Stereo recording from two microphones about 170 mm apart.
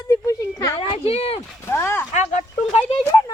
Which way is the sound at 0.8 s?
35° left (ahead or behind).